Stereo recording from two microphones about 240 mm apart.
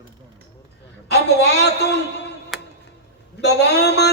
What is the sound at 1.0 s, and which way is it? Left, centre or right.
A man's voice, left.